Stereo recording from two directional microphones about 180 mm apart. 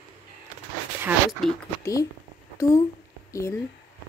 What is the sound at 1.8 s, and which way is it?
Speech, 20° left (ahead or behind).